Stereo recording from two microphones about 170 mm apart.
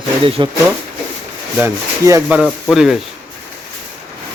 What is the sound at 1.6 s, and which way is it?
Speech, 15° right (ahead or behind).